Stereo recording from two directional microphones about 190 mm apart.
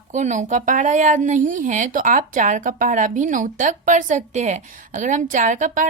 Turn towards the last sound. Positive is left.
turn(degrees=-40)  # may be behind; listen again after turning